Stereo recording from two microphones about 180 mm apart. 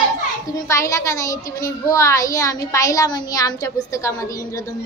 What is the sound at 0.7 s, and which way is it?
A child's voice, 15° left (ahead or behind).